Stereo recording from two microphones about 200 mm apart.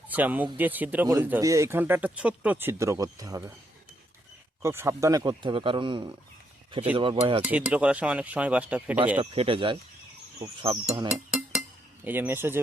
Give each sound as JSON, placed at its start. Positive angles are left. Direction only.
{"t": 0.1, "sound": "speech", "side_deg": -10}
{"t": 4.6, "sound": "speech", "side_deg": -10}
{"t": 7.4, "sound": "speech", "side_deg": -5}
{"t": 9.3, "sound": "speech", "side_deg": -25}
{"t": 12.0, "sound": "speech", "side_deg": -10}